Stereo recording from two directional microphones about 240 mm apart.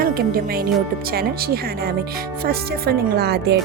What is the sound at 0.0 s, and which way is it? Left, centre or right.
Speech, right.